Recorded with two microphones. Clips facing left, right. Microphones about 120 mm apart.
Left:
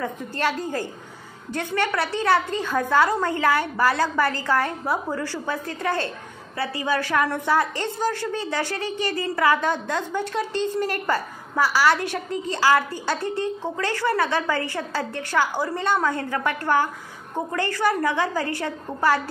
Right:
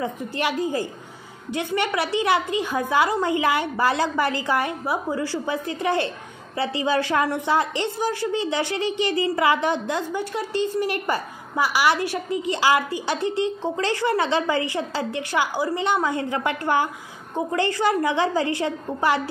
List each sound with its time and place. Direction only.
0.0 s a woman's voice: 15° right (ahead or behind)